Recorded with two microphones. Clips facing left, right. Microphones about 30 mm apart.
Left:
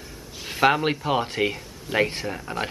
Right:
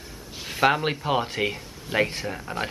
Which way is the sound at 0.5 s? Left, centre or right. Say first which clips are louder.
Left 2 dB; centre.